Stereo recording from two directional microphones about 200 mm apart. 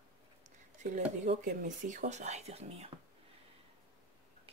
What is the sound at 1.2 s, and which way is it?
Speech, 40° right (ahead or behind).